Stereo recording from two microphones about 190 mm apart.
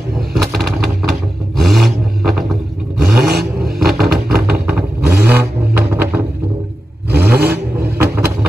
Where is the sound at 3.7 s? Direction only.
Centre (ahead or behind).